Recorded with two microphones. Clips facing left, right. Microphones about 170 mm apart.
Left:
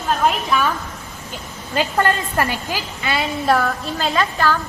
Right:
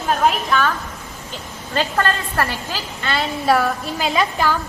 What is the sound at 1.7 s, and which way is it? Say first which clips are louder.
A woman's voice: left 2 dB; 15° left (ahead or behind).